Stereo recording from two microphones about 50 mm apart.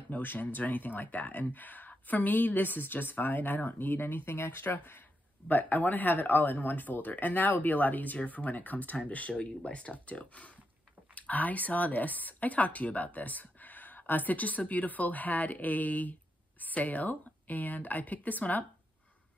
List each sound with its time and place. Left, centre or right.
0.1 s speech: left